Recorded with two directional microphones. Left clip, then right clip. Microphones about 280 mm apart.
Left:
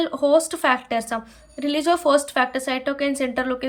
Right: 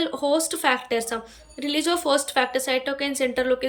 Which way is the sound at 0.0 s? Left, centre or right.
Centre.